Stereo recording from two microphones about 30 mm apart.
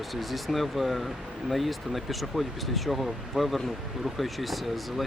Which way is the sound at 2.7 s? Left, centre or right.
Centre.